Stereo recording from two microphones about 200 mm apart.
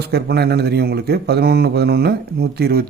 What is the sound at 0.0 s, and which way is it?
A man's voice, 55° right (ahead or behind).